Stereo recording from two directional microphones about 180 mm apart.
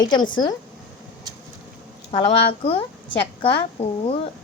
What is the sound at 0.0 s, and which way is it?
Speech, 25° left (ahead or behind).